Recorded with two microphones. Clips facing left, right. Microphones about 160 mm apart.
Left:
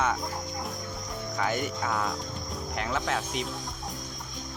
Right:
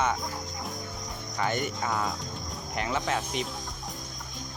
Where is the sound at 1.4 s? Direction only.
5° left (ahead or behind).